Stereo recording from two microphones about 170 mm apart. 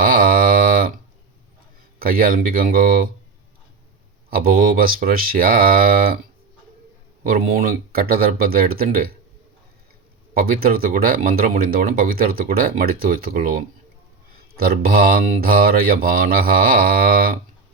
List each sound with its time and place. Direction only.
0.0 s a sound: 55° right (ahead or behind)
2.0 s speech: 60° right (ahead or behind)
4.3 s speech: 60° right (ahead or behind)
7.3 s speech: 60° right (ahead or behind)
10.3 s speech: 60° right (ahead or behind)